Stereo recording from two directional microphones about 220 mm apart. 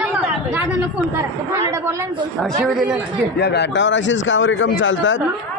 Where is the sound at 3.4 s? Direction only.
50° left (ahead or behind).